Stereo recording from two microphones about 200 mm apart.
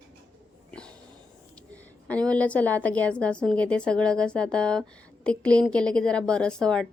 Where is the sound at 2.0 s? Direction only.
5° left (ahead or behind).